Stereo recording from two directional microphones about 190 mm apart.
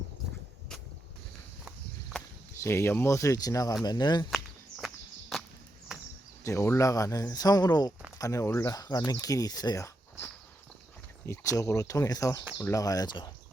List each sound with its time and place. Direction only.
2.6 s speech: 15° left (ahead or behind)
6.4 s speech: 15° left (ahead or behind)
11.3 s speech: 15° left (ahead or behind)